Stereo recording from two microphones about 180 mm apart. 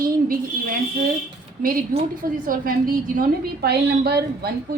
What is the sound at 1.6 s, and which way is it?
A woman's voice, 50° right (ahead or behind).